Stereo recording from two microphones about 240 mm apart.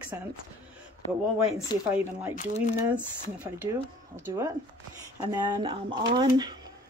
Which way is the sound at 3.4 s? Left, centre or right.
Centre.